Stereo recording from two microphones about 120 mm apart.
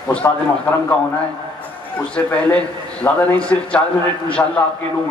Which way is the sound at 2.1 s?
10° left (ahead or behind).